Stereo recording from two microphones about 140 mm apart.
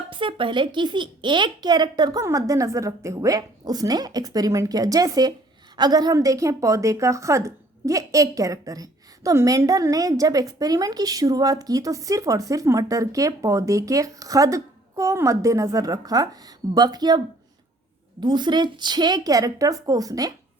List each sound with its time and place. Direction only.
0.1 s a woman's voice: 35° right (ahead or behind)
18.2 s a woman's voice: 35° right (ahead or behind)